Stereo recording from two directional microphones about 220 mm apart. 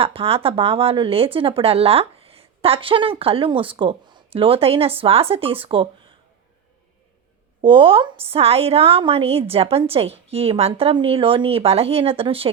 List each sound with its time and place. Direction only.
0.0 s speech: 25° right (ahead or behind)
7.6 s speech: 25° right (ahead or behind)